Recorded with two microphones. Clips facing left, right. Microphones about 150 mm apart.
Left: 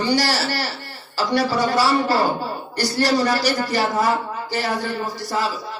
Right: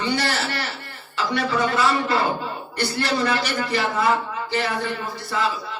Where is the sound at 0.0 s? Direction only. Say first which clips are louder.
Left 3 dB; 35° left (ahead or behind).